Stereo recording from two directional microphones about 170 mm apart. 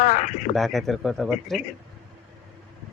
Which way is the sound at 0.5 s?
Centre (ahead or behind).